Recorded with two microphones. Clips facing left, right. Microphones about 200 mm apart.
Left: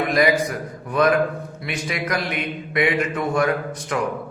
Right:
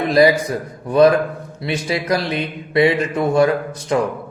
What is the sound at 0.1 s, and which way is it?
Speech, 30° right (ahead or behind).